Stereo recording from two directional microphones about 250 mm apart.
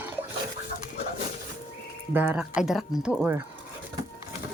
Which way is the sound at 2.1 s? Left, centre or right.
Centre.